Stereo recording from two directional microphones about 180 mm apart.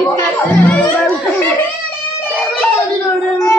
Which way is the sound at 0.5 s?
10° left (ahead or behind).